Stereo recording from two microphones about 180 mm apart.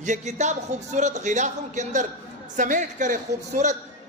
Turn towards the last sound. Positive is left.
turn(degrees=-45)  # may be behind; listen again after turning